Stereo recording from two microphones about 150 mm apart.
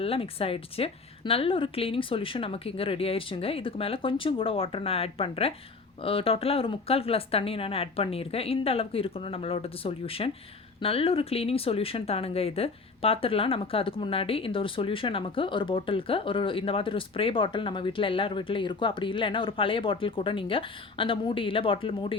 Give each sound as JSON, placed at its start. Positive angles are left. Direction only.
{"t": 0.0, "sound": "speech", "side_deg": 40}